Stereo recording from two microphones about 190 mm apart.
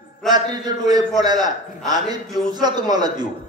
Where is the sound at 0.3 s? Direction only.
20° right (ahead or behind).